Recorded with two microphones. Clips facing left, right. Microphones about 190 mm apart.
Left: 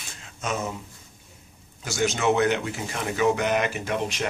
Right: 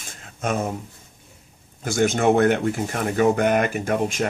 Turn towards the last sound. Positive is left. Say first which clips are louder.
# right 5 dB
turn(degrees=-45)  # may be behind; listen again after turning